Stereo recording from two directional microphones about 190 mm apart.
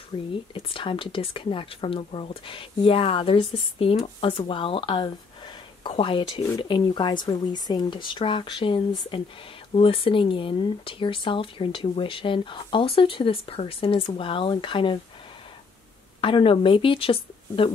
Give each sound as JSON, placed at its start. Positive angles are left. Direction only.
{"t": 0.1, "sound": "speech", "side_deg": 30}
{"t": 16.2, "sound": "speech", "side_deg": 25}